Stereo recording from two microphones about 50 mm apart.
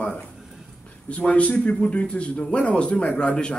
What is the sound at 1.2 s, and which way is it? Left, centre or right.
A man's voice, left.